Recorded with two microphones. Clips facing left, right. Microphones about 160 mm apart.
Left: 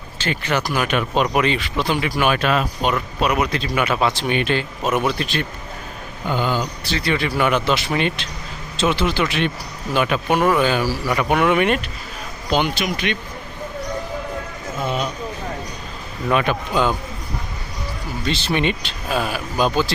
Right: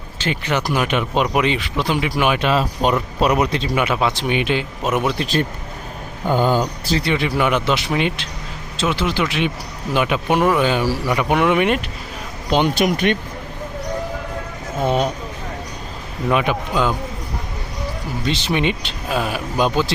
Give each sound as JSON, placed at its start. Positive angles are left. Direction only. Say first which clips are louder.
{"t": 0.2, "sound": "speech", "louder": "right 1 dB", "side_deg": -15}
{"t": 3.8, "sound": "speech", "louder": "even", "side_deg": -10}
{"t": 6.2, "sound": "speech", "louder": "right 4 dB", "side_deg": -45}
{"t": 7.0, "sound": "speech", "louder": "left 1 dB", "side_deg": -20}
{"t": 12.5, "sound": "speech", "louder": "right 2 dB", "side_deg": -25}
{"t": 13.1, "sound": "speech", "louder": "right 5 dB", "side_deg": -50}
{"t": 14.8, "sound": "speech", "louder": "right 6 dB", "side_deg": -55}
{"t": 16.3, "sound": "speech", "louder": "even", "side_deg": -10}
{"t": 18.3, "sound": "speech", "louder": "right 1 dB", "side_deg": -15}